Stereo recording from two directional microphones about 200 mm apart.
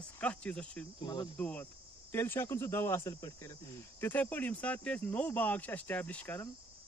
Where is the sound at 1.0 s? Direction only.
20° left (ahead or behind).